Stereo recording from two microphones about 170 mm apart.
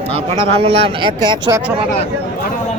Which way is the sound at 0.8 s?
30° right (ahead or behind).